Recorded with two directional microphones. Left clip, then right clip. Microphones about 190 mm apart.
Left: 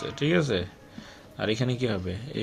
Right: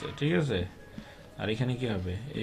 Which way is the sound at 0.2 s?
30° left (ahead or behind).